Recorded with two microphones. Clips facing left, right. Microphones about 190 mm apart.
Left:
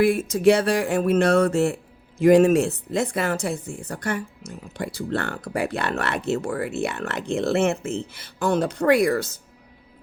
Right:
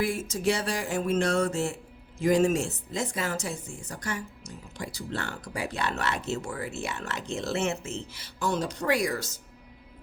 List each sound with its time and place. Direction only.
0.0 s speech: 60° left (ahead or behind)